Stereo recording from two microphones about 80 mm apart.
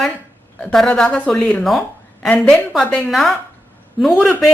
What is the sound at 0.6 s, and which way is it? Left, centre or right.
A woman's voice, centre.